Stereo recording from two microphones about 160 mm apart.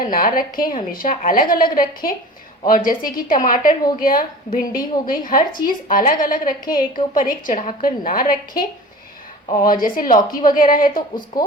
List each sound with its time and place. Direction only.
0.0 s a woman's voice: 60° left (ahead or behind)